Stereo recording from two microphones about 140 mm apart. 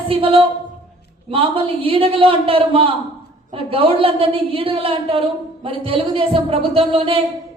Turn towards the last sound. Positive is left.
turn(degrees=-40)  # may be behind; listen again after turning